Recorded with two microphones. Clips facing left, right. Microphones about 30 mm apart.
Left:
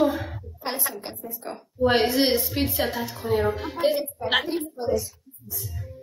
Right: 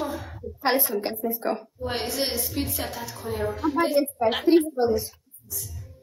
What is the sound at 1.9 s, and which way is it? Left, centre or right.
A woman's voice, left.